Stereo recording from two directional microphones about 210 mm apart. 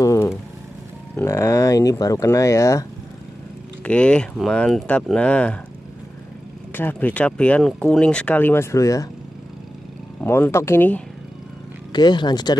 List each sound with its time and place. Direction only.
0.0 s vehicle: 15° left (ahead or behind)
1.1 s speech: 15° left (ahead or behind)
6.7 s speech: 10° left (ahead or behind)
10.2 s speech: 10° left (ahead or behind)